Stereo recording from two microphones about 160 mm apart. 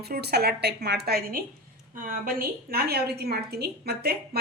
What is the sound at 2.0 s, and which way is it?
Speech, 60° right (ahead or behind).